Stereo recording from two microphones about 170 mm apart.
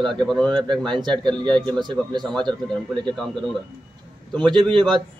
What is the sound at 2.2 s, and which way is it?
A man's voice, 5° left (ahead or behind).